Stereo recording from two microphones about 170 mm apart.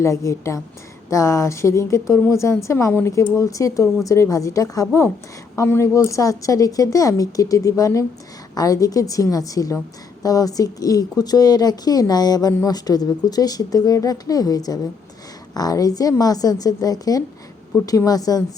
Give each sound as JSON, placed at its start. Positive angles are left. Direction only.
{"t": 0.0, "sound": "a woman's voice", "side_deg": 20}